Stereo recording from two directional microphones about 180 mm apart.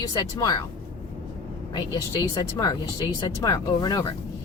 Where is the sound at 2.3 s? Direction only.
20° left (ahead or behind).